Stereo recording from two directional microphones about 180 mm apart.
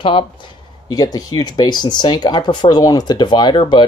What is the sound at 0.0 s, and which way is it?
Speech, 30° left (ahead or behind).